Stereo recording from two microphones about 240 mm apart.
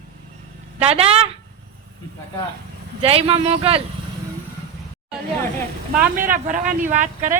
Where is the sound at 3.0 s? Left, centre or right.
Right.